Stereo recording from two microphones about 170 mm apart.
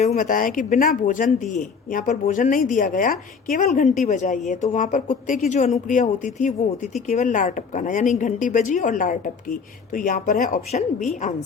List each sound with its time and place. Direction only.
0.0 s a woman's voice: 45° left (ahead or behind)